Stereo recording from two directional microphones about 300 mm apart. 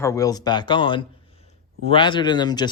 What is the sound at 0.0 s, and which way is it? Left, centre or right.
Speech, centre.